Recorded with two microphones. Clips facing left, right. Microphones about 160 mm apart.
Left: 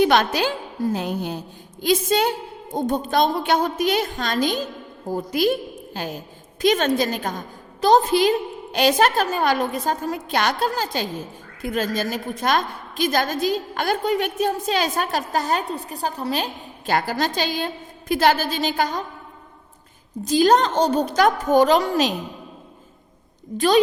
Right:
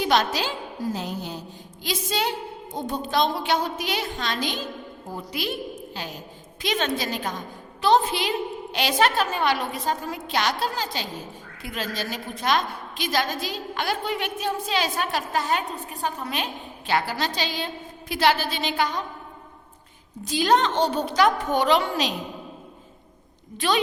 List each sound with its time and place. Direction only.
0.0 s a woman's voice: 55° left (ahead or behind)
20.2 s a woman's voice: 40° left (ahead or behind)
23.6 s a woman's voice: 40° left (ahead or behind)